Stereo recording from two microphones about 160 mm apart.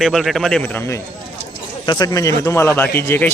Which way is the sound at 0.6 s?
15° left (ahead or behind).